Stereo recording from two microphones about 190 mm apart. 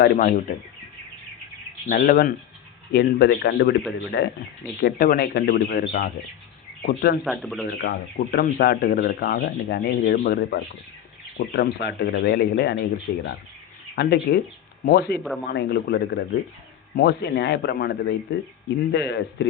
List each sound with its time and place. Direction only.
0.0 s speech: 45° left (ahead or behind)
1.9 s speech: 50° left (ahead or behind)
2.9 s speech: 60° left (ahead or behind)
4.8 s speech: 50° left (ahead or behind)
7.3 s speech: centre (ahead or behind)
7.8 s speech: 55° left (ahead or behind)